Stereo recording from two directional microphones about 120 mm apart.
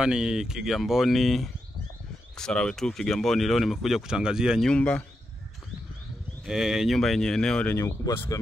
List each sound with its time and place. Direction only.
0.0 s speech: 5° right (ahead or behind)
4.6 s speech: 10° left (ahead or behind)
6.4 s speech: 5° right (ahead or behind)
7.7 s speech: 25° left (ahead or behind)